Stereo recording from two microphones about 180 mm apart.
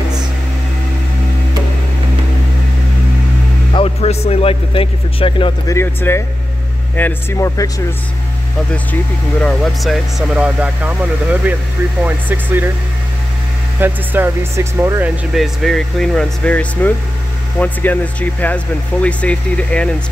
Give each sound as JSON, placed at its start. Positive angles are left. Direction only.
{"t": 3.7, "sound": "a man's voice", "side_deg": 35}
{"t": 5.7, "sound": "speech", "side_deg": 15}
{"t": 9.4, "sound": "speech", "side_deg": 0}
{"t": 13.7, "sound": "speech", "side_deg": -10}
{"t": 15.3, "sound": "speech", "side_deg": 0}